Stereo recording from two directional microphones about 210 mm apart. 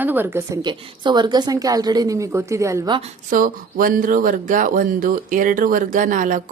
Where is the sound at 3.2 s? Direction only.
40° right (ahead or behind).